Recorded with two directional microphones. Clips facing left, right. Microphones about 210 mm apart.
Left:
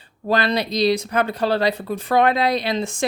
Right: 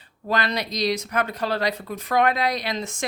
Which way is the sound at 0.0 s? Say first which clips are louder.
Left 5 dB; 30° left (ahead or behind).